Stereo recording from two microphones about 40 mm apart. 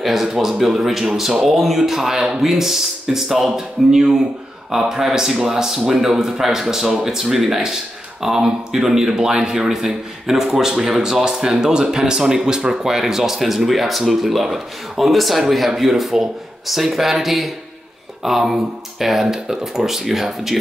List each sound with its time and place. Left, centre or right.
0.0 s a man's voice: centre
12.9 s a man's voice: centre